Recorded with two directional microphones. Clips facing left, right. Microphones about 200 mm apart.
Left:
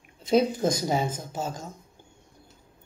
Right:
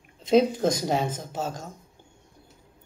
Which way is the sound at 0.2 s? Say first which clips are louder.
Right 2 dB; centre (ahead or behind).